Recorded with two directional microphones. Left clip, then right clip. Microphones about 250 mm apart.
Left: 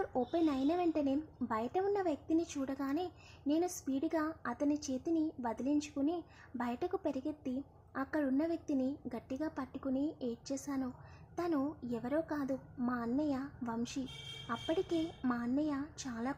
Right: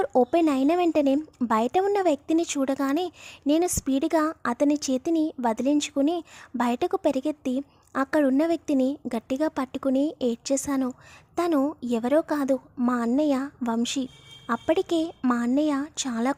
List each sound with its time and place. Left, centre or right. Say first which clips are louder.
0.0 s speech: right 13 dB; right